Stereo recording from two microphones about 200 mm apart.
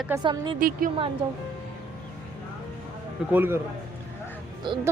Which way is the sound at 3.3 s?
10° right (ahead or behind).